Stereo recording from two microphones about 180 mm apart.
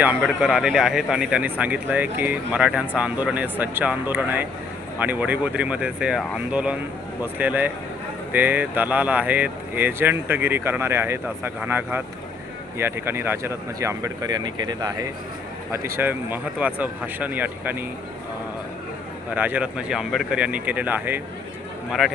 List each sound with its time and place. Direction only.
0.0 s speech: 5° right (ahead or behind)
19.3 s speech: 10° right (ahead or behind)